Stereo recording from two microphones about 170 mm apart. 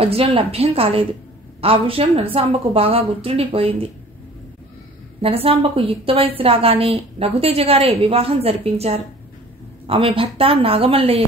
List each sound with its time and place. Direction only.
0.0 s a woman's voice: 35° right (ahead or behind)
5.2 s a woman's voice: 35° right (ahead or behind)